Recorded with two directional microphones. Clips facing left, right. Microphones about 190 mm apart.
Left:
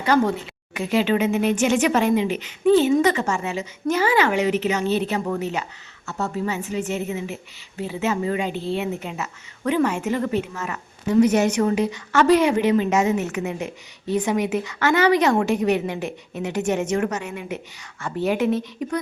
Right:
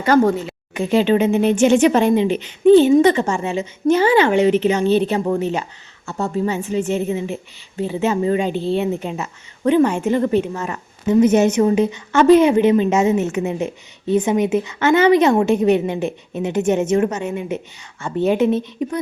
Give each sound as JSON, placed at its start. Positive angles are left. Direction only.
{"t": 0.0, "sound": "speech", "side_deg": -45}
{"t": 0.7, "sound": "a woman's voice", "side_deg": -30}